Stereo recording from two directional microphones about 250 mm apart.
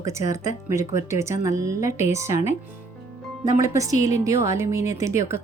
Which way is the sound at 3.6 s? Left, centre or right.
Centre.